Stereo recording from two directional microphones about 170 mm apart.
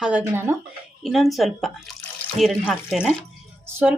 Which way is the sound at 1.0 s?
Centre (ahead or behind).